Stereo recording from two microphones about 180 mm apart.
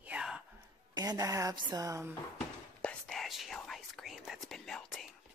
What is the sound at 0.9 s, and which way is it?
Speech, 20° right (ahead or behind).